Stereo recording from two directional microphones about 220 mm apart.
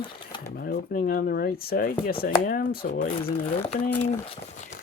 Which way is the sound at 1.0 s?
40° left (ahead or behind).